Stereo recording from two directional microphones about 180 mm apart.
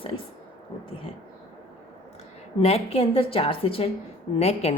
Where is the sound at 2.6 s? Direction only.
35° left (ahead or behind).